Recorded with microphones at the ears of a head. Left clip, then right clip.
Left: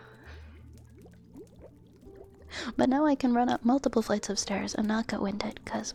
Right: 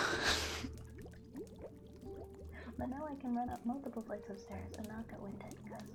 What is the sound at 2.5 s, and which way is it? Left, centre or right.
Speech, left.